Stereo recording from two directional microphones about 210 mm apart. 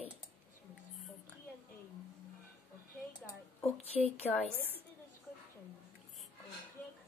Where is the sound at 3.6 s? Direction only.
30° left (ahead or behind).